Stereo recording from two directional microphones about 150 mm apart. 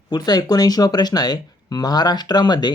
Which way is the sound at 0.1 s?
25° left (ahead or behind).